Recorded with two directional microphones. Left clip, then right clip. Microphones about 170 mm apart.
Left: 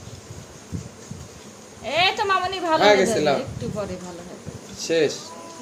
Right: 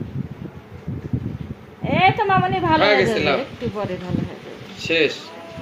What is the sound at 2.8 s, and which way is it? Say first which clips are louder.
Speech: left 3 dB; 55° left (ahead or behind).